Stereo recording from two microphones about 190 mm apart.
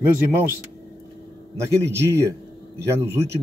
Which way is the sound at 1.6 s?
15° right (ahead or behind).